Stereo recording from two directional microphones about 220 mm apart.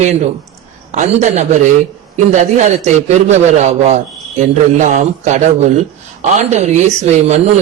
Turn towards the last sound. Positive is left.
turn(degrees=-30)  # may be behind; listen again after turning